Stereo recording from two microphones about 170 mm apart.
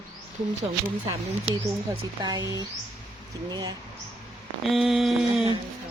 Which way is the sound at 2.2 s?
25° right (ahead or behind).